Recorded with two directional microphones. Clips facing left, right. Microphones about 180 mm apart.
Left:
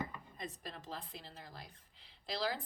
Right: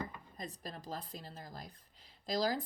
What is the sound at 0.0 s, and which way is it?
Speech, 40° right (ahead or behind).